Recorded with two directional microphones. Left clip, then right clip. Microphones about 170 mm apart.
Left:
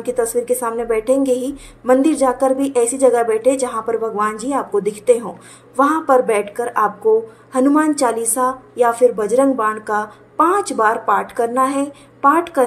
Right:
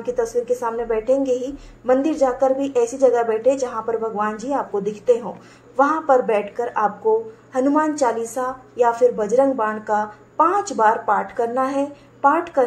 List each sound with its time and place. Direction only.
0.5 s a woman's voice: 25° left (ahead or behind)